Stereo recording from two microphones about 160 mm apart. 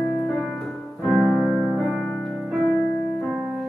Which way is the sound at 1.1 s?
Centre (ahead or behind).